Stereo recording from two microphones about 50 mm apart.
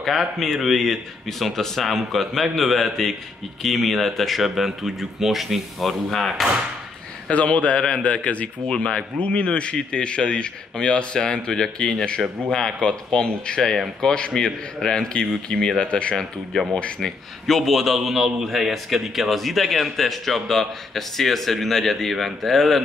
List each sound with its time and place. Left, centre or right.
0.0 s a man's voice: centre
7.2 s a man's voice: left
17.5 s a man's voice: centre